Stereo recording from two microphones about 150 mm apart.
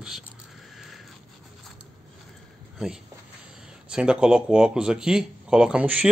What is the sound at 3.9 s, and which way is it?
Speech, 5° right (ahead or behind).